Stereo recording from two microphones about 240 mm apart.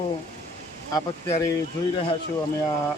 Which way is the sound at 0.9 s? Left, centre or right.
Centre.